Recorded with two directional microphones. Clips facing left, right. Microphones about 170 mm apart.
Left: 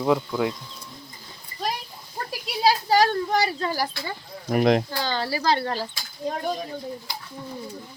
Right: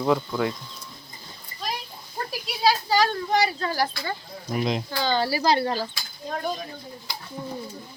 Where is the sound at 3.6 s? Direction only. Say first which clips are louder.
Right 1 dB; 10° left (ahead or behind).